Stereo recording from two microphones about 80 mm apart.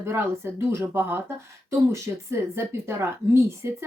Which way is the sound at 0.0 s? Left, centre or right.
Right.